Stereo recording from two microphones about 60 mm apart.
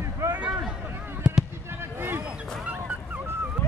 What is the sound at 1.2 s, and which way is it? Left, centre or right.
Fireworks, centre.